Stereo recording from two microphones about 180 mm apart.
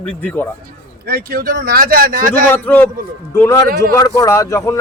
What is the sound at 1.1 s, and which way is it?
Speech, 55° right (ahead or behind).